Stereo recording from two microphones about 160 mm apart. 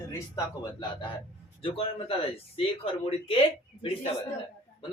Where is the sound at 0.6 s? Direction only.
25° left (ahead or behind).